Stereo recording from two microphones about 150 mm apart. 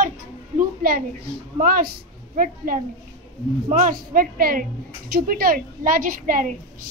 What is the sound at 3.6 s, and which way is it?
A woman's voice, 60° right (ahead or behind).